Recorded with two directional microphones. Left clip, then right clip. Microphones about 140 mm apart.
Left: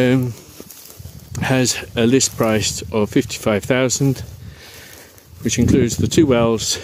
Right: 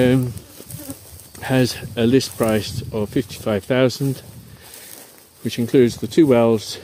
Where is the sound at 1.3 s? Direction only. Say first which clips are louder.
Left 2 dB; 65° left (ahead or behind).